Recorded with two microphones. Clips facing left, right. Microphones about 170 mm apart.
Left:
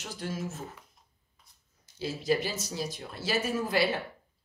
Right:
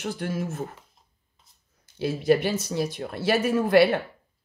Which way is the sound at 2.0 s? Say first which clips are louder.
Right 7 dB; 60° right (ahead or behind).